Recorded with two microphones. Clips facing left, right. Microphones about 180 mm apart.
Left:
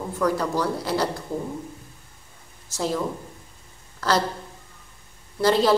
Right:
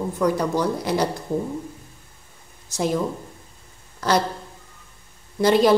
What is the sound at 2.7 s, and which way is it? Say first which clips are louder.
A woman's voice: right 3 dB; 15° right (ahead or behind).